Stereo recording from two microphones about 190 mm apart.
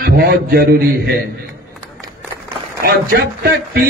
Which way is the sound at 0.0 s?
55° right (ahead or behind).